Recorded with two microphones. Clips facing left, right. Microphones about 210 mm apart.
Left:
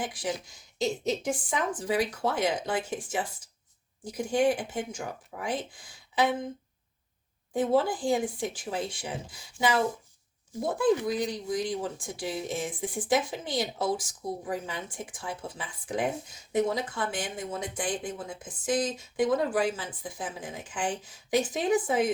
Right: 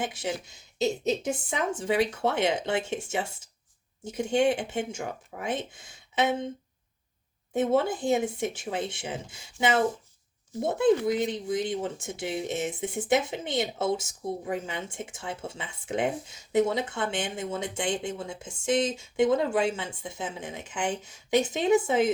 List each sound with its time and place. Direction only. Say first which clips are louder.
0.0 s speech: right 1 dB; 25° right (ahead or behind)
7.5 s speech: right 1 dB; 25° right (ahead or behind)